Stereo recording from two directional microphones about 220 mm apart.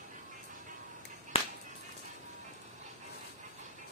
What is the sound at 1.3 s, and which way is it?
Music, 25° left (ahead or behind).